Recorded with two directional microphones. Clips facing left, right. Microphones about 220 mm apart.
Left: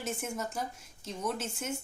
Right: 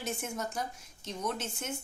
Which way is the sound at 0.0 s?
5° left (ahead or behind).